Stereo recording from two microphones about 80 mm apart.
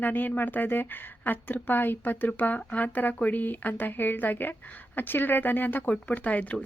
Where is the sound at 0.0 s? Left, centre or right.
Left.